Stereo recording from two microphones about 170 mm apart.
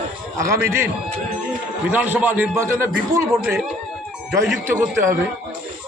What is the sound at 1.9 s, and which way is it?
A man's voice, 10° right (ahead or behind).